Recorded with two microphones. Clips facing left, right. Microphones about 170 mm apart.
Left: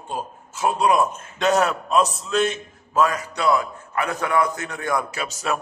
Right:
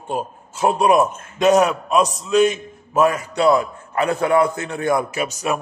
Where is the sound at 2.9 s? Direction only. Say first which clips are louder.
Right 4 dB; 25° right (ahead or behind).